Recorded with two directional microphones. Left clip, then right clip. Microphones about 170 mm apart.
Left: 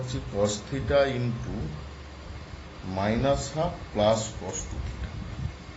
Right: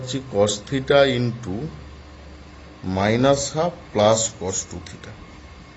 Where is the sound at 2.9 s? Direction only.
80° right.